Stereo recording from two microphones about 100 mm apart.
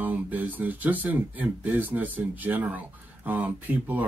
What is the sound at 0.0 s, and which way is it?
Speech, 15° right (ahead or behind).